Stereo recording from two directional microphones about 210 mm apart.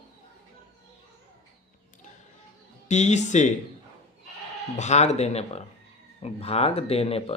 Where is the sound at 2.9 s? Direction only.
35° left (ahead or behind).